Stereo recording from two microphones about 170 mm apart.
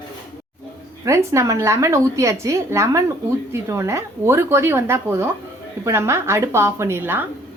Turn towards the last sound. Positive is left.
turn(degrees=-15)  # may be behind; listen again after turning